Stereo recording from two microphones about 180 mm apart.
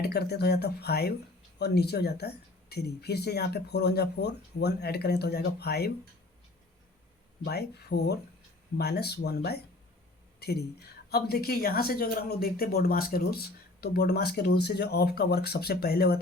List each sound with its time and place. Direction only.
0.0 s speech: 60° left (ahead or behind)
7.4 s speech: 65° left (ahead or behind)